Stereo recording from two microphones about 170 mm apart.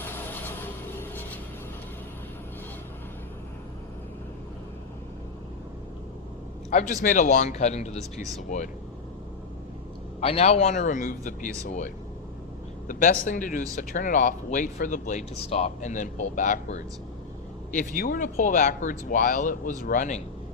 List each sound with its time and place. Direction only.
0.0 s vehicle: 10° left (ahead or behind)
6.7 s speech: 45° left (ahead or behind)
10.2 s speech: 35° left (ahead or behind)
12.9 s speech: 50° left (ahead or behind)
17.7 s speech: 55° left (ahead or behind)